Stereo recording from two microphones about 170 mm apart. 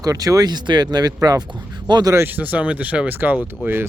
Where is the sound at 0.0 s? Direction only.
20° right (ahead or behind).